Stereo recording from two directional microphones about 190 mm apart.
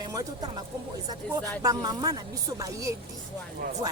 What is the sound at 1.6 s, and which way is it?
A woman's voice, 20° right (ahead or behind).